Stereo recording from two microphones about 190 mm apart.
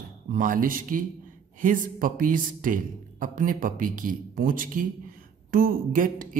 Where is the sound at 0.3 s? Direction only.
45° right (ahead or behind).